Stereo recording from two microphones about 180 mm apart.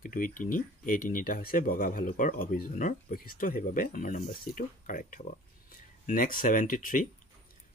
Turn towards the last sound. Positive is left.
turn(degrees=50)  # may be behind; listen again after turning